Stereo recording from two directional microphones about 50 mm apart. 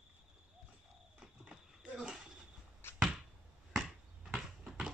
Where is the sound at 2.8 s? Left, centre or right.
Left.